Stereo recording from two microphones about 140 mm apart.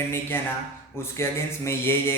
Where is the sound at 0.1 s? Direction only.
15° left (ahead or behind).